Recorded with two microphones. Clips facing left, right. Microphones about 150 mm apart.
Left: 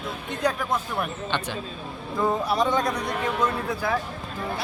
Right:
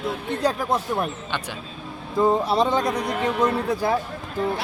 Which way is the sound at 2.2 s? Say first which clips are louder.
Right 4 dB; 25° right (ahead or behind).